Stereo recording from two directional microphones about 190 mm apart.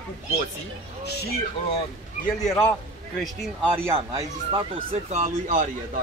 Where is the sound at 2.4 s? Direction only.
10° left (ahead or behind).